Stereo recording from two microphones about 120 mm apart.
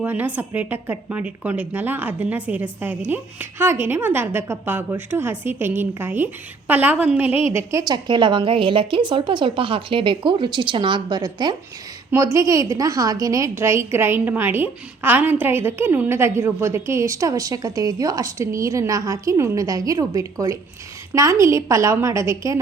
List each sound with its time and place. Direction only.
0.0 s a woman's voice: 15° right (ahead or behind)
7.5 s a woman's voice: 25° right (ahead or behind)